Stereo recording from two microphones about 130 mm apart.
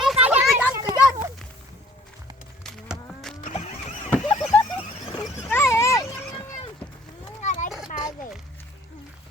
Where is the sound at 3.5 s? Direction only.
65° left (ahead or behind).